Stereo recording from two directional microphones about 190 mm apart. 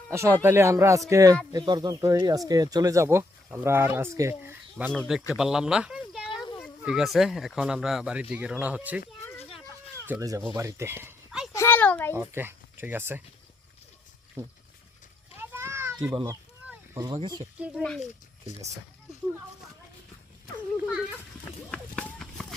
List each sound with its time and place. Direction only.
0.1 s speech: 15° right (ahead or behind)
4.9 s speech: centre (ahead or behind)
10.1 s speech: 15° right (ahead or behind)
11.5 s a sound: 10° left (ahead or behind)
12.1 s speech: 10° right (ahead or behind)
15.4 s children playing: 10° right (ahead or behind)
16.2 s a sound: 15° right (ahead or behind)
17.1 s speech: 25° right (ahead or behind)
21.7 s run: 5° left (ahead or behind)